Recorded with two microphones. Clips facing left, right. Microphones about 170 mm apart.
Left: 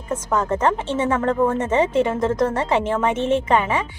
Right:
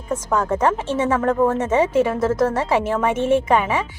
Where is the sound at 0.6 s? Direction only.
10° right (ahead or behind).